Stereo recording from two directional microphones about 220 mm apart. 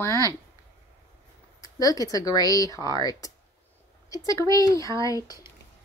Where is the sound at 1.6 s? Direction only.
15° left (ahead or behind).